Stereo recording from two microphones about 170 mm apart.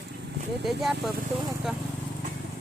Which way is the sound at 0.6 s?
Centre (ahead or behind).